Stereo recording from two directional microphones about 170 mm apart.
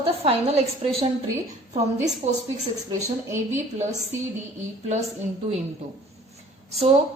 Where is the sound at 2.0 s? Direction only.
40° right (ahead or behind).